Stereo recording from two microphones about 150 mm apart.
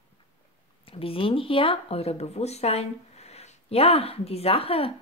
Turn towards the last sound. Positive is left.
turn(degrees=40)  # may be behind; listen again after turning